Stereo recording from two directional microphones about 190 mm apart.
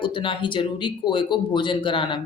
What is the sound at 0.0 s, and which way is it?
Speech, 25° left (ahead or behind).